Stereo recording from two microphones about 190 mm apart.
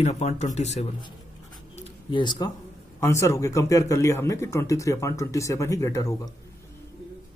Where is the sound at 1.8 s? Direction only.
25° left (ahead or behind).